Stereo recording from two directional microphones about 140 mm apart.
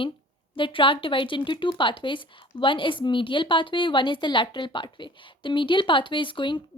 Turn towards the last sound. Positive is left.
turn(degrees=35)  # may be behind; listen again after turning